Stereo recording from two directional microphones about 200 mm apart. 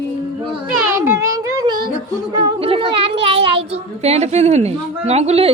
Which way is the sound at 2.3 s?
25° right (ahead or behind).